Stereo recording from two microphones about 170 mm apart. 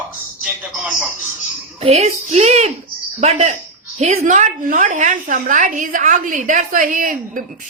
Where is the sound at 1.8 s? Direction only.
40° right (ahead or behind).